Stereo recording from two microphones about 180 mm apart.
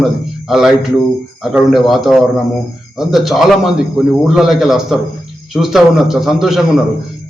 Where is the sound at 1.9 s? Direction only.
Centre (ahead or behind).